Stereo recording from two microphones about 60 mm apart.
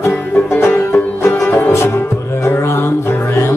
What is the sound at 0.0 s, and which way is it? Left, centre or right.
Music, left.